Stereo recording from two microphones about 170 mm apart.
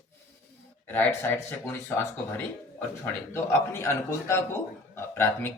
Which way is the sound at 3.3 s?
15° left (ahead or behind).